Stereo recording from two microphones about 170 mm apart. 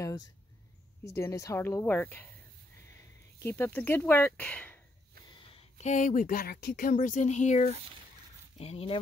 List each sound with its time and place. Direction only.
1.1 s speech: 20° left (ahead or behind)
3.4 s speech: 10° left (ahead or behind)
5.5 s speech: 40° left (ahead or behind)